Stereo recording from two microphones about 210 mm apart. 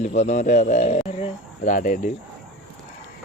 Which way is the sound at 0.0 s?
35° left (ahead or behind).